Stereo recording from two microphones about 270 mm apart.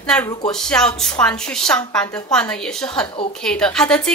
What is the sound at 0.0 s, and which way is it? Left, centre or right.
A woman's voice, centre.